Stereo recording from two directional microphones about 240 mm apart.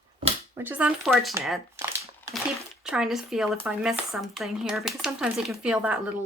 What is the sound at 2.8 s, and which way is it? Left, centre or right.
Speech, centre.